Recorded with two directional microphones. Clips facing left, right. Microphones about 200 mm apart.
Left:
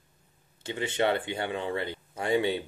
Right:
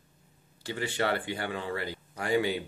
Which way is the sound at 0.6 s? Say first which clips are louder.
Left 3 dB; 20° left (ahead or behind).